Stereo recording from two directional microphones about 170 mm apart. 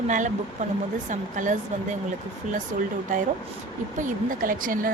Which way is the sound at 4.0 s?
50° right (ahead or behind).